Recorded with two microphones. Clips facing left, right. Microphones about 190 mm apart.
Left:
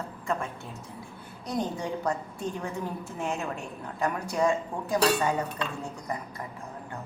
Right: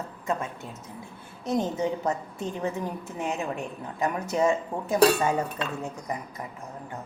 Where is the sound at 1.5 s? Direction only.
20° right (ahead or behind).